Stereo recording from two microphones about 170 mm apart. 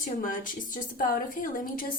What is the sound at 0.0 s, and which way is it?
A woman's voice, 50° left (ahead or behind).